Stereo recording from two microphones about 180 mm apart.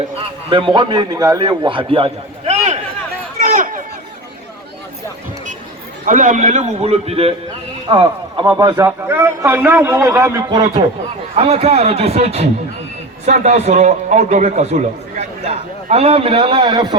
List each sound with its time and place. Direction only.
0.2 s a man's voice: 25° right (ahead or behind)
3.4 s a sound: 45° right (ahead or behind)
6.1 s a man's voice: 45° right (ahead or behind); by 10.6 s 15° right (ahead or behind)
11.3 s a man's voice: 35° right (ahead or behind)